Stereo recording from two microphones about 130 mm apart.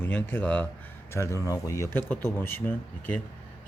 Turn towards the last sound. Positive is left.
turn(degrees=15)  # may be behind; listen again after turning